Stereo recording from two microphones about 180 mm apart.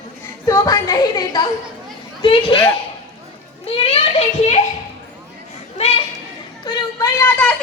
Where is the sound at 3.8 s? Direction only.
30° left (ahead or behind).